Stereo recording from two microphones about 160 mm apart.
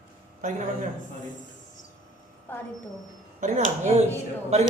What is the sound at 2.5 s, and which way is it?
Speech, 10° left (ahead or behind).